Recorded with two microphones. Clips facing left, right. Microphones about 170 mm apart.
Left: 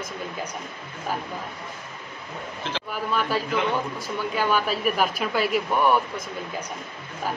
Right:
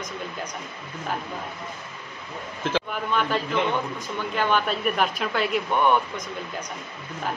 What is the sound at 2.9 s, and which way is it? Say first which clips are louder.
A man's voice: even; 5° left (ahead or behind).